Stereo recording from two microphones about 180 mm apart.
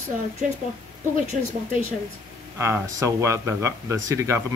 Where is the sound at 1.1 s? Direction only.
45° right (ahead or behind).